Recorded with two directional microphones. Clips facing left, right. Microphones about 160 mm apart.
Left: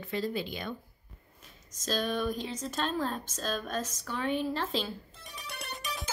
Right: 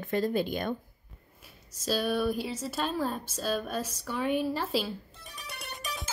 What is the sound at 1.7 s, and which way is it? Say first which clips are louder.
Speech: right 3 dB; 10° right (ahead or behind).